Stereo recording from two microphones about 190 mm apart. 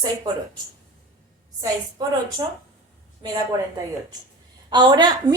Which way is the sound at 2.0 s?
20° right (ahead or behind).